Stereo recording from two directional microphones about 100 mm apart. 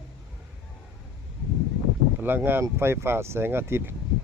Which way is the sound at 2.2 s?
20° right (ahead or behind).